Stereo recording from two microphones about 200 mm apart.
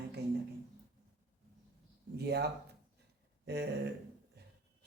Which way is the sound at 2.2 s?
55° right (ahead or behind).